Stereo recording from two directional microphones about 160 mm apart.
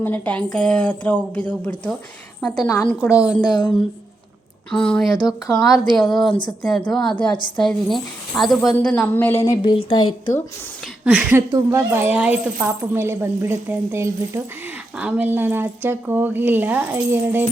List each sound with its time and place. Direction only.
0.0 s a woman's voice: 10° left (ahead or behind)
3.0 s a woman's voice: 5° right (ahead or behind)
3.4 s speech: 25° left (ahead or behind)
4.7 s a woman's voice: 5° left (ahead or behind)
9.6 s a woman's voice: 30° left (ahead or behind)
11.0 s speech: 5° right (ahead or behind)